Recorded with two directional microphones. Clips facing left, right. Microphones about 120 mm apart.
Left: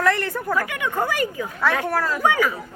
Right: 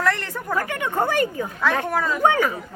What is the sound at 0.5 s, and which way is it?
Speech, 20° right (ahead or behind).